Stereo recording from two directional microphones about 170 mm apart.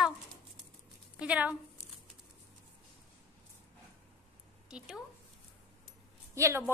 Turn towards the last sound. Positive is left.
turn(degrees=-15)  # may be behind; listen again after turning